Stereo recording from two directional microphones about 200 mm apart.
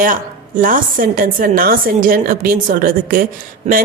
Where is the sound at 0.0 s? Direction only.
40° right (ahead or behind).